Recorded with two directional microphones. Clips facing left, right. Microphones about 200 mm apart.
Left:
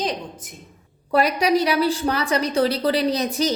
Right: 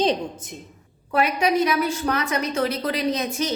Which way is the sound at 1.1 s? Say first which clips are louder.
Left 2 dB; 35° left (ahead or behind).